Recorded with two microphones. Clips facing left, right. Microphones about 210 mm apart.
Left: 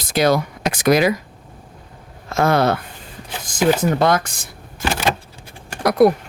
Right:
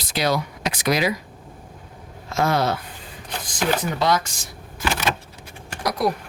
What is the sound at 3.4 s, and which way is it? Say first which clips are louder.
Speech: left 7 dB; 45° left (ahead or behind).